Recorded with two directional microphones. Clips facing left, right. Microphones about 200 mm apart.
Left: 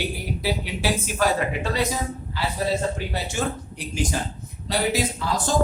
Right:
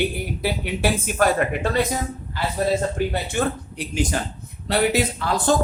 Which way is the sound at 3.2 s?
60° right (ahead or behind).